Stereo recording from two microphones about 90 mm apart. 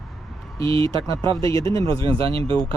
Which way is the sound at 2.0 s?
80° right.